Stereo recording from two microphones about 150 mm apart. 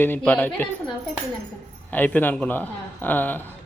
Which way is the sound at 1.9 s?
10° left (ahead or behind).